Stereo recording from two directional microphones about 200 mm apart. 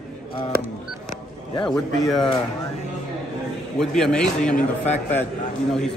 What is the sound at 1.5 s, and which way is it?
Speech, 25° left (ahead or behind).